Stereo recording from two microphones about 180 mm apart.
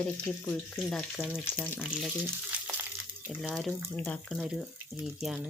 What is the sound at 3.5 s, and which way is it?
Speech, centre (ahead or behind).